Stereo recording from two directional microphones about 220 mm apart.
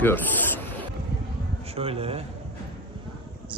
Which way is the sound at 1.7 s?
25° right (ahead or behind).